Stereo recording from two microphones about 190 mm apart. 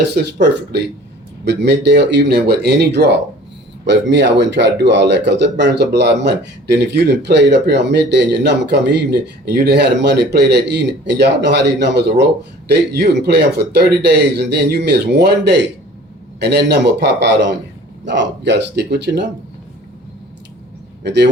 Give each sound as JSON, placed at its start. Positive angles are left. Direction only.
{"t": 0.2, "sound": "speech", "side_deg": -55}
{"t": 1.5, "sound": "speech", "side_deg": -60}
{"t": 21.0, "sound": "speech", "side_deg": -65}